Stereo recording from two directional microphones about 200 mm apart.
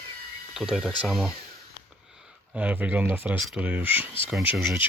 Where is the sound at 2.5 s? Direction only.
5° right (ahead or behind).